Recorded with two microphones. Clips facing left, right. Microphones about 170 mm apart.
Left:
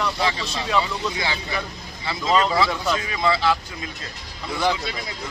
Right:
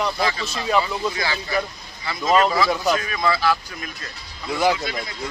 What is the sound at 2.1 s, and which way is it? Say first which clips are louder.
Speech: right 2 dB; 25° left (ahead or behind).